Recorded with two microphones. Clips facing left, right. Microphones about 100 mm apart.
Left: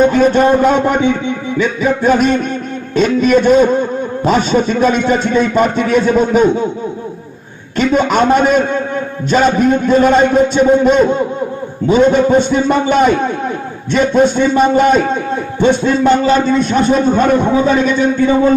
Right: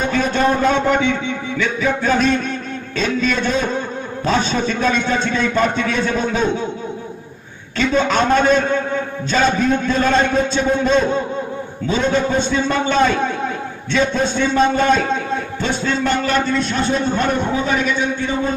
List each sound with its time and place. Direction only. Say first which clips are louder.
0.1 s a man's voice: left 7 dB; 15° left (ahead or behind)
7.8 s a man's voice: left 5 dB; 15° left (ahead or behind); by 17.9 s 30° left (ahead or behind)